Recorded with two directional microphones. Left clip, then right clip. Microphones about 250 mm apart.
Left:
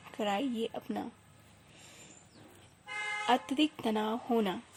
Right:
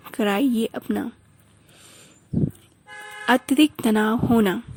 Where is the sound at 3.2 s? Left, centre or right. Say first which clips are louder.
Right 12 dB; right.